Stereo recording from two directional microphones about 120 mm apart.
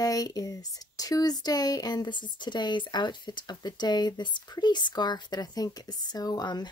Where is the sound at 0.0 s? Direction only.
30° left (ahead or behind).